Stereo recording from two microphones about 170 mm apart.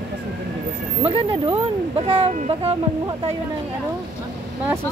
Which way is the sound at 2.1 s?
35° right (ahead or behind).